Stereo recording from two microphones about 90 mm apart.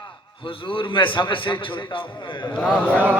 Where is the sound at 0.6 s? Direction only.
70° left (ahead or behind).